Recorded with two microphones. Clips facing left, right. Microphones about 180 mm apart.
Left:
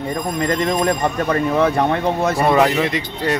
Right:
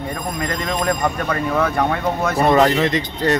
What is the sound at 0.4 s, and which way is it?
Speech, 25° left (ahead or behind).